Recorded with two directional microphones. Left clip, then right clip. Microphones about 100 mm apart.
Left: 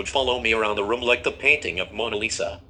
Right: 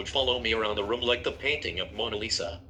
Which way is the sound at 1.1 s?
40° left (ahead or behind).